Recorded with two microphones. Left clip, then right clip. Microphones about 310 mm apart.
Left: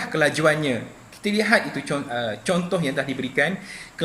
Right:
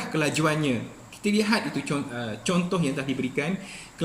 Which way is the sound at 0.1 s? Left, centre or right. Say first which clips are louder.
Left 6 dB; centre.